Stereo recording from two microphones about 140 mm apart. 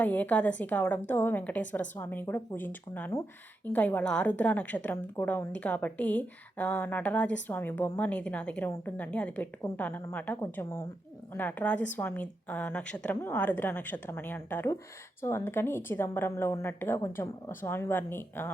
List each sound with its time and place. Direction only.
0.0 s a woman's voice: 10° left (ahead or behind)